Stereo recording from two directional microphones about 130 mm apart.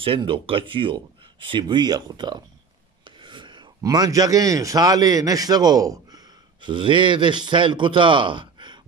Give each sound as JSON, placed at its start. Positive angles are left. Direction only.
{"t": 0.0, "sound": "a man's voice", "side_deg": -45}